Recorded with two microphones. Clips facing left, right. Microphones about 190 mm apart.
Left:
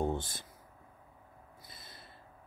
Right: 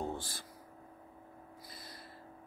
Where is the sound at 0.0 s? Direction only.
20° left (ahead or behind).